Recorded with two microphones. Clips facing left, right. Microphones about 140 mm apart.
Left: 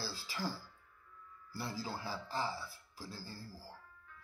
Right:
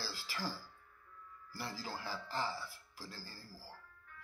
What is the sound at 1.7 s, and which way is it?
A man's voice, 20° left (ahead or behind).